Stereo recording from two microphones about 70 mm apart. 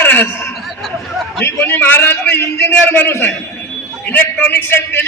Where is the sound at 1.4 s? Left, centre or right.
Left.